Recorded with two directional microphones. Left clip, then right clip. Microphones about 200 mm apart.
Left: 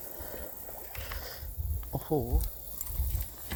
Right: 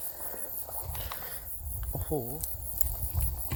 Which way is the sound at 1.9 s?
25° left (ahead or behind).